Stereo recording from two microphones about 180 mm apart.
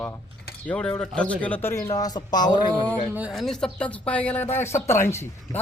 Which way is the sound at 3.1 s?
5° right (ahead or behind).